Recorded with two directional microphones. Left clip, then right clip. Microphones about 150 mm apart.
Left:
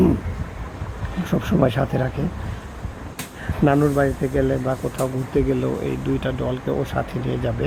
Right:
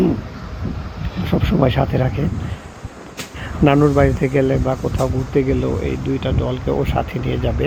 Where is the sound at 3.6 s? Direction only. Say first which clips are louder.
Right 4 dB; 30° right (ahead or behind).